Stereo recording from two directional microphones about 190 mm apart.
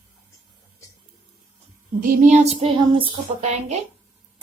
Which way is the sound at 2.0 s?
40° right (ahead or behind).